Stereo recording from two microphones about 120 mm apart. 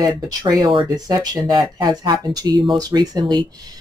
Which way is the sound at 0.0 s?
30° right (ahead or behind).